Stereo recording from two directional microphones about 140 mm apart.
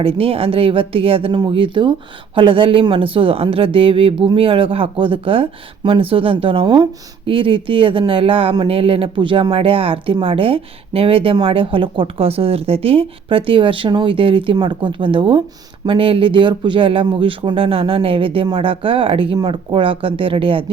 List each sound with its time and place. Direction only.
0.0 s speech: 40° right (ahead or behind)